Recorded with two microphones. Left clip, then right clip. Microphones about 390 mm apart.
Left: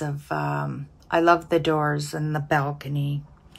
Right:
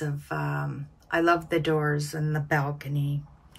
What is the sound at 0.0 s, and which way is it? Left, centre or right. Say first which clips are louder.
Speech: left 4 dB; centre.